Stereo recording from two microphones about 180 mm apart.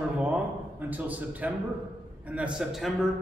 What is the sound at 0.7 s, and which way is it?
A man's voice, 10° right (ahead or behind).